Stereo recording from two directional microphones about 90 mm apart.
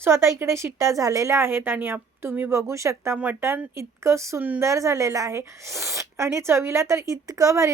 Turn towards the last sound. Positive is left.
turn(degrees=-35)  # may be behind; listen again after turning